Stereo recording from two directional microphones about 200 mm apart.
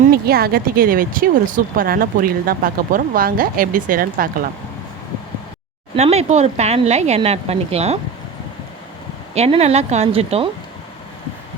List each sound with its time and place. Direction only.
0.1 s speech: 50° right (ahead or behind)
6.0 s speech: 30° right (ahead or behind)
9.3 s speech: 30° right (ahead or behind)